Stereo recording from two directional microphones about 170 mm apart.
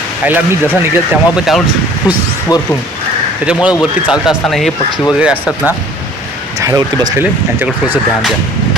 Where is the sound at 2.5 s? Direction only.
20° left (ahead or behind).